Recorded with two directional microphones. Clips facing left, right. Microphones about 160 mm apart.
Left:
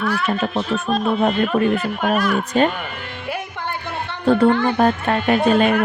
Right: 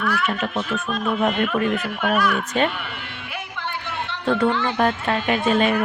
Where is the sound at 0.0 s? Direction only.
35° left (ahead or behind).